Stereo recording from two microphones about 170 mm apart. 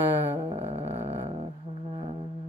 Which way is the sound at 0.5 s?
35° right (ahead or behind).